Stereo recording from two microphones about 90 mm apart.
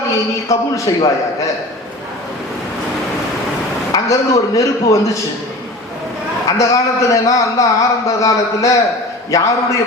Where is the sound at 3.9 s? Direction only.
35° left (ahead or behind).